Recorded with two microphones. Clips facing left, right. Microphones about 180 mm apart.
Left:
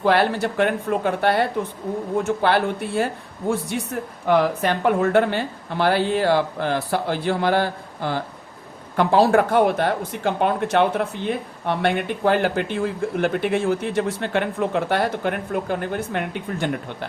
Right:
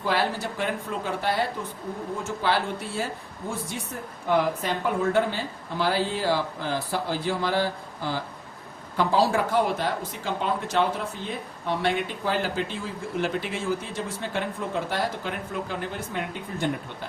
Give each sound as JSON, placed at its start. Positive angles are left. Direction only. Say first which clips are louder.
{"t": 0.0, "sound": "speech", "louder": "left 7 dB", "side_deg": 65}
{"t": 4.3, "sound": "speech", "louder": "left 5 dB", "side_deg": 75}